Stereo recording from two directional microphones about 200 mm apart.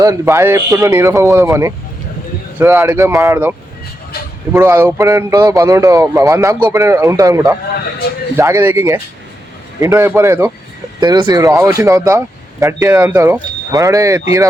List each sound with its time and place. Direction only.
0.0 s speech: 15° right (ahead or behind)
4.5 s speech: 10° right (ahead or behind)